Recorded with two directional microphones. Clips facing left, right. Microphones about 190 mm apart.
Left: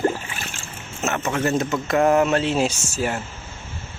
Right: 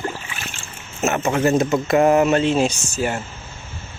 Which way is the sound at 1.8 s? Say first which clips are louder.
Right 1 dB; 10° right (ahead or behind).